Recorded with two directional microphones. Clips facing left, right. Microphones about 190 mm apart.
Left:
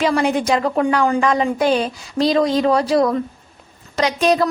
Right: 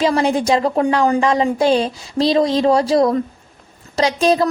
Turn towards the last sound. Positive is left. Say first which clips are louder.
# right 1 dB
turn(degrees=-30)  # may be behind; listen again after turning